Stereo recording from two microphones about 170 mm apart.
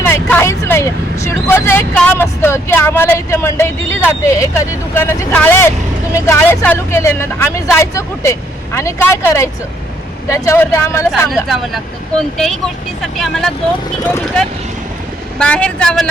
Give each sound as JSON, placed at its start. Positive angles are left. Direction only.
{"t": 0.0, "sound": "vehicle", "side_deg": 10}
{"t": 2.0, "sound": "speech", "side_deg": 10}
{"t": 11.3, "sound": "speech", "side_deg": 0}
{"t": 15.4, "sound": "speech", "side_deg": 5}